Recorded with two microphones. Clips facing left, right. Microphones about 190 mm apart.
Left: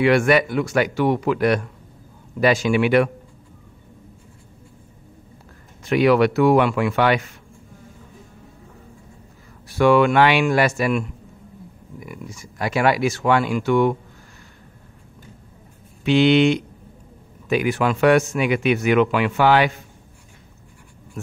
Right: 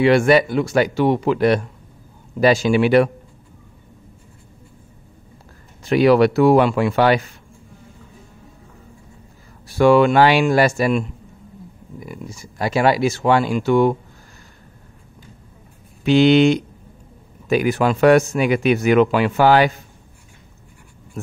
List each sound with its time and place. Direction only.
0.0 s speech: 30° right (ahead or behind)
5.9 s speech: 35° right (ahead or behind)
9.7 s speech: 30° right (ahead or behind)
16.0 s speech: 40° right (ahead or behind)